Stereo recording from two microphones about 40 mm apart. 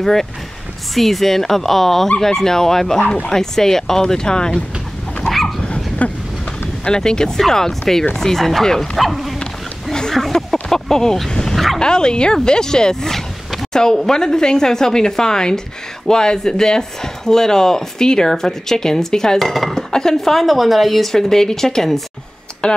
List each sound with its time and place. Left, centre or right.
0.0 s speech: centre
5.2 s dog: centre
5.6 s dog: left
6.8 s speech: centre
10.1 s a sound: centre
11.2 s speech: centre
11.5 s bow-wow: centre
11.8 s speech: left